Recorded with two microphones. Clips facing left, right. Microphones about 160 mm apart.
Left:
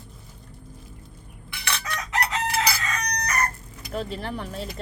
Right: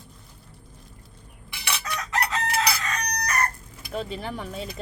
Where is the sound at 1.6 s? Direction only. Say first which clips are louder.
Even; 10° right (ahead or behind).